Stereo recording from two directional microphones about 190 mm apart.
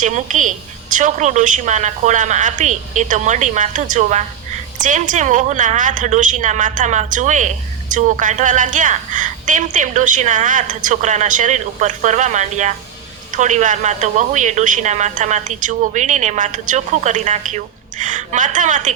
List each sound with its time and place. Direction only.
0.0 s a woman's voice: 40° right (ahead or behind)